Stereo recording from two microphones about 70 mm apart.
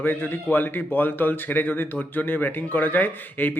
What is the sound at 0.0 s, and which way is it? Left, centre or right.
Speech, left.